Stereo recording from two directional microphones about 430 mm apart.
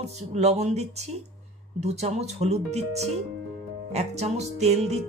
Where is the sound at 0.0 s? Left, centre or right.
Centre.